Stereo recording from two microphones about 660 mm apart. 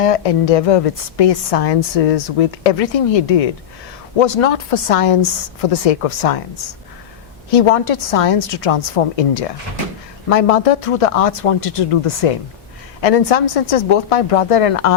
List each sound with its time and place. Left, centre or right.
0.0 s a woman's voice: left
7.5 s a woman's voice: left